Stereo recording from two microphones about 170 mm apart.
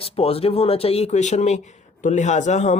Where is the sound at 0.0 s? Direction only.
35° left (ahead or behind).